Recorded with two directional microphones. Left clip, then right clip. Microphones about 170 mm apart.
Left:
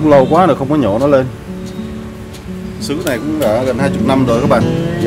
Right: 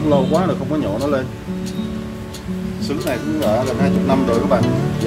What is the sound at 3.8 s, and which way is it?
Speech, 60° left (ahead or behind).